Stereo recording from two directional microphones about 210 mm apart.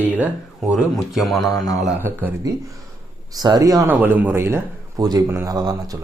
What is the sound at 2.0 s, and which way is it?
Speech, 10° right (ahead or behind).